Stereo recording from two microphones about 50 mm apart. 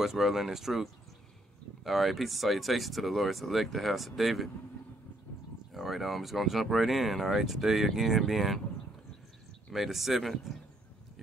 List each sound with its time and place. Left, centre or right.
0.0 s speech: centre
1.9 s speech: centre
5.7 s speech: centre
9.7 s speech: centre